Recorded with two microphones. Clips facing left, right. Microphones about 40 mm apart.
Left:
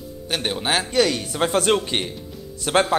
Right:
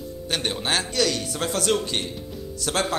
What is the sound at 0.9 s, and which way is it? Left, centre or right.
A man's voice, left.